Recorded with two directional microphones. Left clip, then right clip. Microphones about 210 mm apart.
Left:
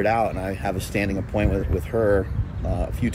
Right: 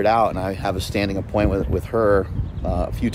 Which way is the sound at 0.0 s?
15° right (ahead or behind).